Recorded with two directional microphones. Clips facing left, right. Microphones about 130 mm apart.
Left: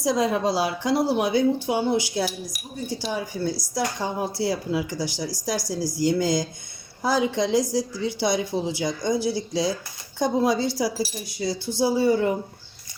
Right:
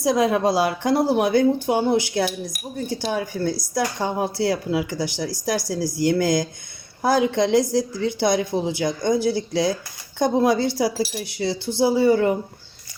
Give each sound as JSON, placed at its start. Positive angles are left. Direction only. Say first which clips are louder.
{"t": 0.0, "sound": "a woman's voice", "louder": "right 3 dB", "side_deg": -60}